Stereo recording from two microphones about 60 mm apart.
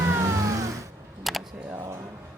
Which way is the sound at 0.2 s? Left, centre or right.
Right.